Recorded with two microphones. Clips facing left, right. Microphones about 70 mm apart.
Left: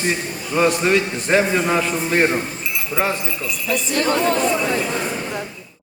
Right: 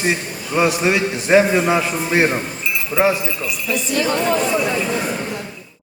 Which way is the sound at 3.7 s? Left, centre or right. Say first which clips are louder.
Even; left.